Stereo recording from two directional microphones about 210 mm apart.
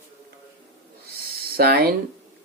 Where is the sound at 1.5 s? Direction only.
45° right (ahead or behind).